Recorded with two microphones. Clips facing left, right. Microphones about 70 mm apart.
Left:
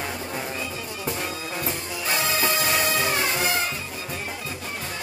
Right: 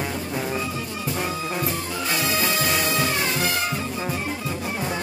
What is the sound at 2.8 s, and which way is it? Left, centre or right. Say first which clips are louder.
Music: right 1 dB; left.